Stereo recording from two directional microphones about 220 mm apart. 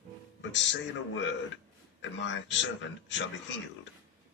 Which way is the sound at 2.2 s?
55° left (ahead or behind).